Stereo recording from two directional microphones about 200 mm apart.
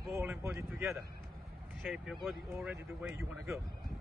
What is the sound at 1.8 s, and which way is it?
Speech, centre (ahead or behind).